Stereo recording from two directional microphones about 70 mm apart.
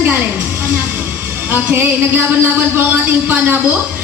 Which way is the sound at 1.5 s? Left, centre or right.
Right.